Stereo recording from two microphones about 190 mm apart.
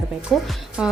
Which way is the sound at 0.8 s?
5° right (ahead or behind).